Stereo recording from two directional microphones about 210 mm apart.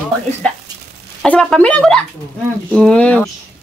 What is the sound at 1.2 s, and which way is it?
A woman's voice, 5° left (ahead or behind).